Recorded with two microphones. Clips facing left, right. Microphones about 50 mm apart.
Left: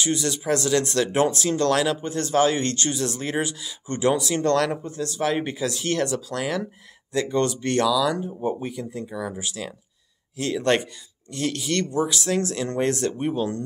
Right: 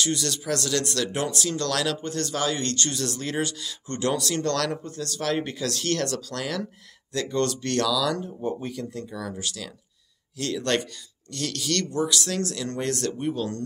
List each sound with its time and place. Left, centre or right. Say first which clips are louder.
0.0 s speech: left 2 dB; centre